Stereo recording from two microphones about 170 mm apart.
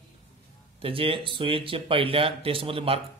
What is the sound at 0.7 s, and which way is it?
Speech, 35° right (ahead or behind).